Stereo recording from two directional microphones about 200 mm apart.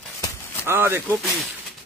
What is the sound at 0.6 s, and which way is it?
Speech, 10° right (ahead or behind).